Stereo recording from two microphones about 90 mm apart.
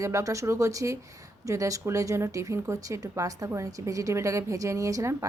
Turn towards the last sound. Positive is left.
turn(degrees=-35)  # may be behind; listen again after turning